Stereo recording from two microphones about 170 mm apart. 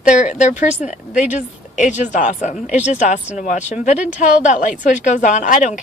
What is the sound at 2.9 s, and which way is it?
Speech, 45° left (ahead or behind).